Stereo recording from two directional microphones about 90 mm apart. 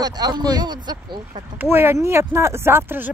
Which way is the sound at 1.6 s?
25° right (ahead or behind).